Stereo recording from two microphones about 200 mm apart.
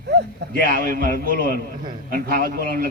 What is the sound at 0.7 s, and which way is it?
A man's voice, 45° right (ahead or behind).